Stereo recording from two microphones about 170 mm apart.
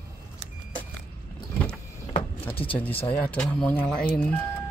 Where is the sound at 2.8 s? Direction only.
10° left (ahead or behind).